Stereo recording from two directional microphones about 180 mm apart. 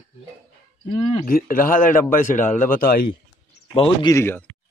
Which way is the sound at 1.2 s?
50° left (ahead or behind).